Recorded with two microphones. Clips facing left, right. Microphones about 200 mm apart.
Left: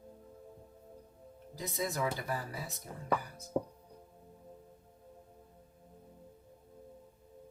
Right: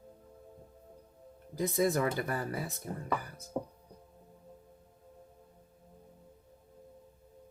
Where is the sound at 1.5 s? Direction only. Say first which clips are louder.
Right 7 dB; 55° right (ahead or behind).